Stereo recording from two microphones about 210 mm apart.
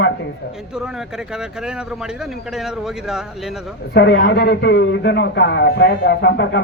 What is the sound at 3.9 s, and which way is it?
A man's voice, 60° left (ahead or behind).